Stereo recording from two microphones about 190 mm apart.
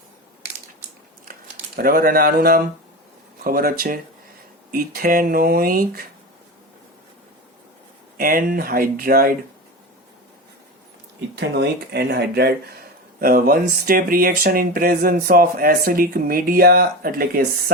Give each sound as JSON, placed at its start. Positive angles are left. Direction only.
{"t": 1.7, "sound": "speech", "side_deg": -50}
{"t": 8.2, "sound": "speech", "side_deg": -50}
{"t": 11.3, "sound": "speech", "side_deg": -60}